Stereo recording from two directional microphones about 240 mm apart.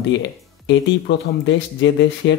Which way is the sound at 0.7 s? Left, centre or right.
Left.